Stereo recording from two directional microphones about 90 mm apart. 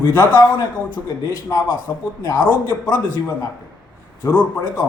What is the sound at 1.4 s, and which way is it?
A man's voice, 50° left (ahead or behind).